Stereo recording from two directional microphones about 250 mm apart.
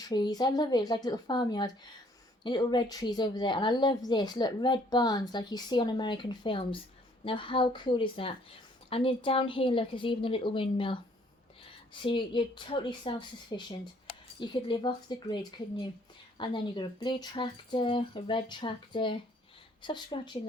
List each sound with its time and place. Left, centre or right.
0.0 s a woman's voice: centre
12.0 s a woman's voice: centre